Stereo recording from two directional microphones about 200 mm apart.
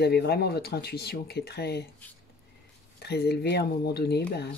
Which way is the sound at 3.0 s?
55° left (ahead or behind).